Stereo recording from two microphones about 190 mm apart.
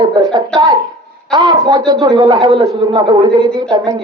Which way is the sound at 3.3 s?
5° left (ahead or behind).